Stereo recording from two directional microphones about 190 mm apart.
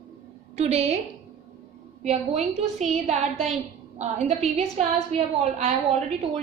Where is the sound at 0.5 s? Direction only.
35° right (ahead or behind).